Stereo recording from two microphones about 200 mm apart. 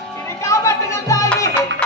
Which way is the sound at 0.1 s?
15° left (ahead or behind).